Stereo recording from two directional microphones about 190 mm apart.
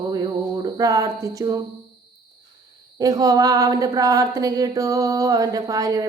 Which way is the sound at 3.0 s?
20° right (ahead or behind).